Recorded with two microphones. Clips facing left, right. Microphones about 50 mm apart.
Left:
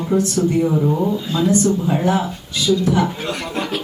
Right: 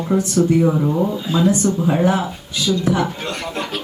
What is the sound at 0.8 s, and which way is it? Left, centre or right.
A woman's voice, centre.